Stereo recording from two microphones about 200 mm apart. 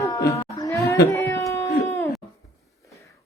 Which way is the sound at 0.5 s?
15° left (ahead or behind).